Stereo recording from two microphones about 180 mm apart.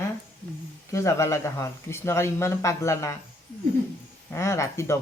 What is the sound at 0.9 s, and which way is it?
Speech, 15° left (ahead or behind).